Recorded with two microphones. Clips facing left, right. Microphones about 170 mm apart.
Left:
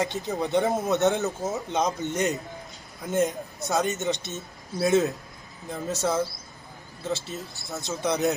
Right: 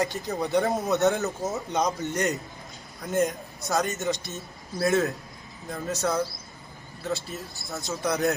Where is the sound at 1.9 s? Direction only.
20° left (ahead or behind).